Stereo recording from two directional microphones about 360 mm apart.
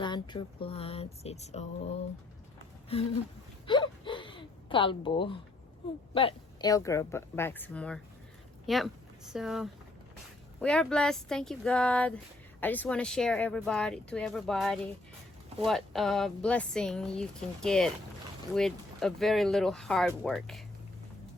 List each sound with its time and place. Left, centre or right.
0.0 s speech: centre
3.7 s a sound: centre
6.1 s speech: centre